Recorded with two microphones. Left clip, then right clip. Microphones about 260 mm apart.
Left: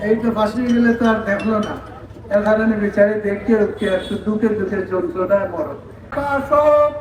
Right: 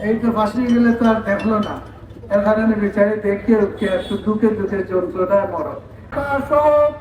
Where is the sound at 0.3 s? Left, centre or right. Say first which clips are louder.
Even; right.